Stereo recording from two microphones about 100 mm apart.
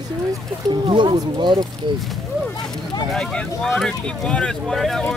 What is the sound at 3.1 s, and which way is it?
Speech, 5° left (ahead or behind).